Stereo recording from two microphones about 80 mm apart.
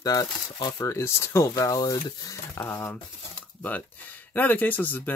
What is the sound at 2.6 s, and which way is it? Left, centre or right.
Speech, left.